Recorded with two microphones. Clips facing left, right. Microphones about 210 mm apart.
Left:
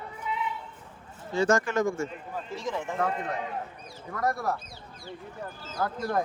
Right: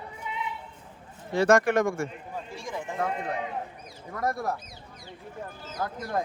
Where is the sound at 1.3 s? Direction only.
60° right (ahead or behind).